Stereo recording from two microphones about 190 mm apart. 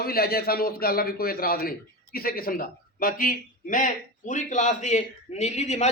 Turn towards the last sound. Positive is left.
turn(degrees=35)  # may be behind; listen again after turning